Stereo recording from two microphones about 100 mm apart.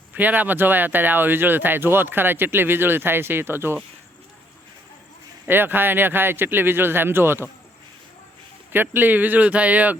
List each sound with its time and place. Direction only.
0.1 s speech: 15° right (ahead or behind)
5.5 s speech: 20° right (ahead or behind)
8.7 s speech: 20° right (ahead or behind)